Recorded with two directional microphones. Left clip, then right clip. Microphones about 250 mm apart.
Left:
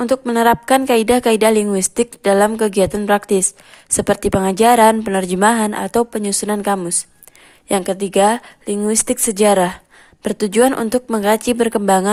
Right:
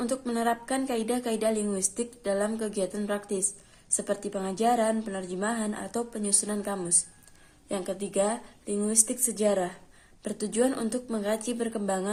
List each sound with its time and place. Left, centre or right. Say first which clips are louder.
0.0 s a woman's voice: left 14 dB; left